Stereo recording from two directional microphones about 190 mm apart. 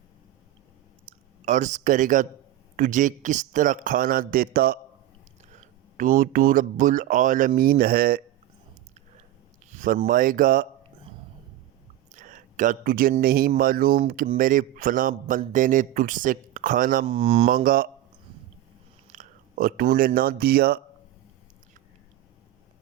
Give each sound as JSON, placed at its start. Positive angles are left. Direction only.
{"t": 1.5, "sound": "a man's voice", "side_deg": -40}
{"t": 9.6, "sound": "a sound", "side_deg": -45}
{"t": 10.1, "sound": "a man's voice", "side_deg": -45}
{"t": 12.1, "sound": "a sound", "side_deg": -45}
{"t": 13.2, "sound": "a man's voice", "side_deg": -50}
{"t": 17.1, "sound": "speech", "side_deg": -30}
{"t": 17.5, "sound": "a man's voice", "side_deg": -50}
{"t": 19.1, "sound": "speech", "side_deg": -45}